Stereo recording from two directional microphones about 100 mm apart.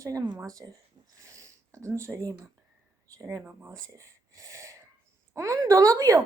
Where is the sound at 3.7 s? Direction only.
35° right (ahead or behind).